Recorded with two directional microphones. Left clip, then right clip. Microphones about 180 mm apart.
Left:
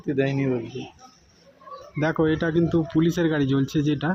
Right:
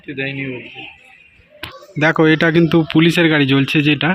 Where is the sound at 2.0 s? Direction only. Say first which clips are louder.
Right 10 dB; 15° right (ahead or behind).